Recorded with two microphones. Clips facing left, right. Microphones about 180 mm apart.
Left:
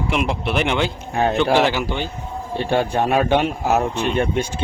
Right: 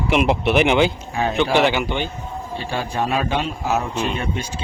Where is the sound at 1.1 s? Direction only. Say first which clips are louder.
Left 3 dB; 55° left (ahead or behind).